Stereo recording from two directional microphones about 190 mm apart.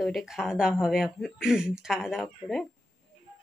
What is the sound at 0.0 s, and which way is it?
A woman's voice, centre (ahead or behind).